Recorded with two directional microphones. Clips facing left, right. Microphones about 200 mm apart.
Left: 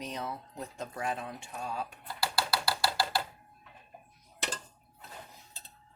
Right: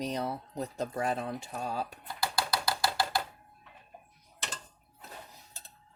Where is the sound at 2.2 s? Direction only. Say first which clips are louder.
Even; 20° right (ahead or behind).